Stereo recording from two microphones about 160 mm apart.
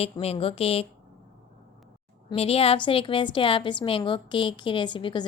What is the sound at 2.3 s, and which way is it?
A woman's voice, 35° left (ahead or behind).